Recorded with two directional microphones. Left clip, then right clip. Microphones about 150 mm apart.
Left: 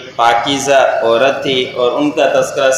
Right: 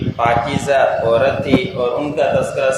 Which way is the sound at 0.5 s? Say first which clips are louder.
Left 4 dB; 25° left (ahead or behind).